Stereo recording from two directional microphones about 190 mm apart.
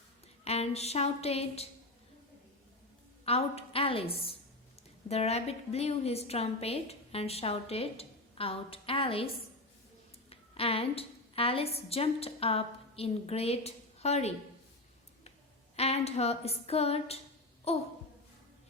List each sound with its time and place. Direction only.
0.4 s a woman's voice: 35° left (ahead or behind)
3.2 s a woman's voice: 30° left (ahead or behind)
15.7 s a woman's voice: 35° left (ahead or behind)